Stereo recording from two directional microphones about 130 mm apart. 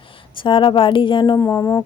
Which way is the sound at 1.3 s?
25° left (ahead or behind).